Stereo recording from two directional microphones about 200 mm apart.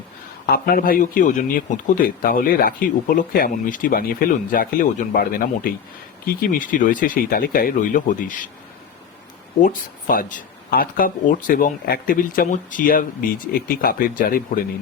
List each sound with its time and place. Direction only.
0.4 s speech: 50° left (ahead or behind)
9.6 s speech: 45° left (ahead or behind)